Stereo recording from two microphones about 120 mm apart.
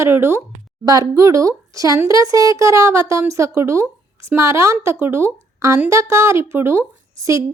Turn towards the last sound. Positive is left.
turn(degrees=-25)  # may be behind; listen again after turning